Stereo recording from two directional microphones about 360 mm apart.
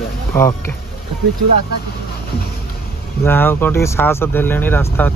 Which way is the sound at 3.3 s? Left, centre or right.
Centre.